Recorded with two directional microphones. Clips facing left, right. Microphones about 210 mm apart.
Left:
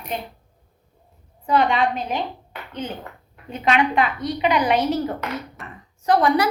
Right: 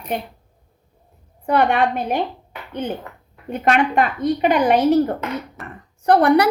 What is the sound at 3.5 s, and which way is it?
A woman's voice, 50° right (ahead or behind).